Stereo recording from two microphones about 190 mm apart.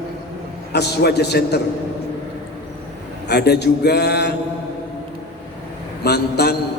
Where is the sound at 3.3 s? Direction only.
60° left (ahead or behind).